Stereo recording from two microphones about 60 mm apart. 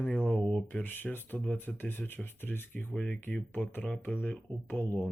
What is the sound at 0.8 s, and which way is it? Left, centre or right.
Speech, left.